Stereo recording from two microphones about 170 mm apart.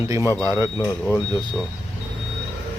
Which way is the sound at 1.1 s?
5° right (ahead or behind).